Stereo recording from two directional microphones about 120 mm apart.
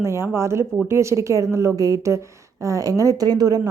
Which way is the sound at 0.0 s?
20° right (ahead or behind).